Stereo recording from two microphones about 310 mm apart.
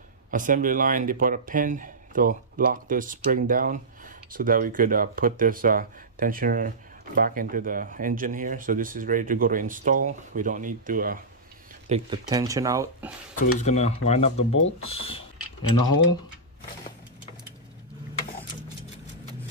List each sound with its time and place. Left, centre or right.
0.3 s speech: right
11.9 s speech: centre
13.4 s speech: left